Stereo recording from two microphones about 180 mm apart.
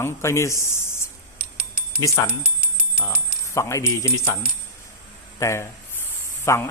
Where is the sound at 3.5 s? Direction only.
15° left (ahead or behind).